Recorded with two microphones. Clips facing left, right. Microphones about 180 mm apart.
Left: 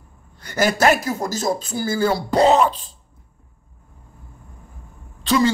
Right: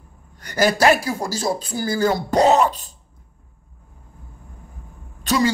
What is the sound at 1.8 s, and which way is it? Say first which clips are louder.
Speech: right 1 dB; 45° right (ahead or behind).